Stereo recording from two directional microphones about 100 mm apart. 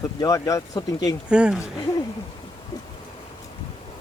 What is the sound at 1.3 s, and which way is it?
Speech, 10° right (ahead or behind).